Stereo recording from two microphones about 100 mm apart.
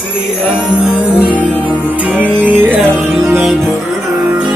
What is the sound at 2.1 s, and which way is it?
Music, 15° right (ahead or behind).